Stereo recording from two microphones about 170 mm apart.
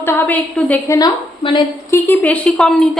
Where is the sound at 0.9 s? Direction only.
25° left (ahead or behind).